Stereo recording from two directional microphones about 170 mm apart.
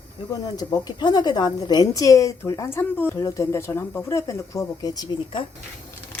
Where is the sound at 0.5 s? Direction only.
20° left (ahead or behind).